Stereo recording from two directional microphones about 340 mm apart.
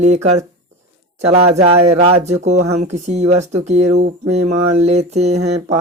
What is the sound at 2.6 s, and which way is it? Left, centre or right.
Speech, right.